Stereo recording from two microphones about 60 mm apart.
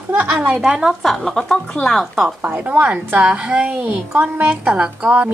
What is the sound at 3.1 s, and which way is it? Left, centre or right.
A woman's voice, centre.